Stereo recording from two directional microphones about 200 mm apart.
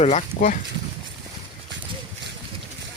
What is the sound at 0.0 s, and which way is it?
Speech, 35° left (ahead or behind).